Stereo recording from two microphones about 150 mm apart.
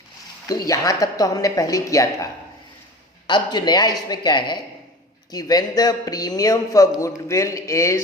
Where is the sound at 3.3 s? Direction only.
30° left (ahead or behind).